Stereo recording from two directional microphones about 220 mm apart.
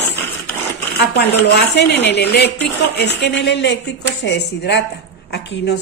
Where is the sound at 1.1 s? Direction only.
50° left (ahead or behind).